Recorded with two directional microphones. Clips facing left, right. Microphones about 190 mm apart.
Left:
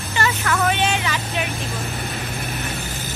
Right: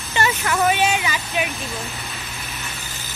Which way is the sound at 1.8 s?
55° left (ahead or behind).